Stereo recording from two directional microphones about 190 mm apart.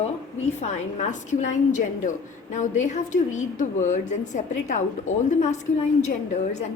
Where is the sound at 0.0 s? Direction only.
35° left (ahead or behind).